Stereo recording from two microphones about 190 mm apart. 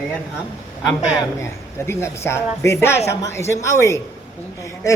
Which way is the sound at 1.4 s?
15° left (ahead or behind).